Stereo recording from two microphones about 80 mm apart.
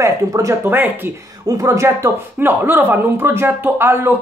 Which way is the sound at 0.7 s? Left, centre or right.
Right.